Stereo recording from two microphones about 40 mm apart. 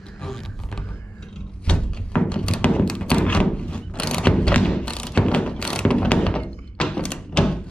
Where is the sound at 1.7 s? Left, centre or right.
Left.